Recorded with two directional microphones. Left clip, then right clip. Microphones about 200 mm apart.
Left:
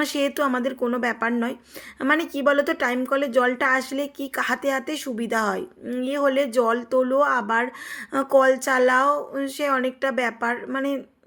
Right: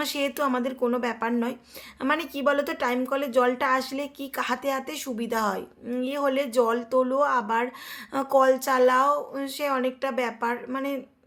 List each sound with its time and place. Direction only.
0.0 s a woman's voice: 20° left (ahead or behind)